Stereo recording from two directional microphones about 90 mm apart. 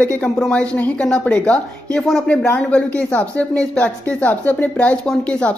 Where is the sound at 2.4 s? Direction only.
20° left (ahead or behind).